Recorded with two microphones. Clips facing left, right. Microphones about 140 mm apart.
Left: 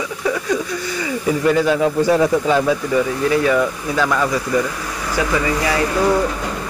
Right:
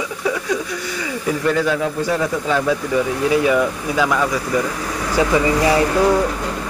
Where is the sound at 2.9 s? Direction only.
5° right (ahead or behind).